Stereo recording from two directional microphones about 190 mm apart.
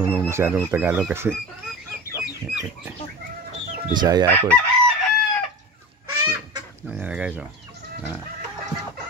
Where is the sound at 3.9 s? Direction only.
20° right (ahead or behind).